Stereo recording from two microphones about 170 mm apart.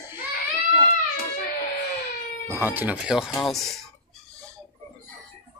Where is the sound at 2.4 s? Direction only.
15° right (ahead or behind).